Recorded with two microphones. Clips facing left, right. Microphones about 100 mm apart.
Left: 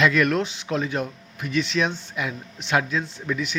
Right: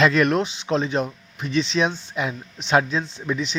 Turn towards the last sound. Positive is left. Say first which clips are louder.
# right 1 dB
turn(degrees=-25)  # may be behind; listen again after turning